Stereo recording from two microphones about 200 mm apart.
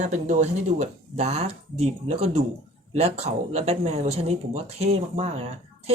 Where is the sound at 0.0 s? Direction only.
35° right (ahead or behind).